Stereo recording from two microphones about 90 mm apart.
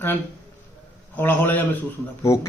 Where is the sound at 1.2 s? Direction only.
20° left (ahead or behind).